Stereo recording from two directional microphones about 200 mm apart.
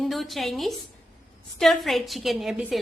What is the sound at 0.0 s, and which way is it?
A woman's voice, centre (ahead or behind).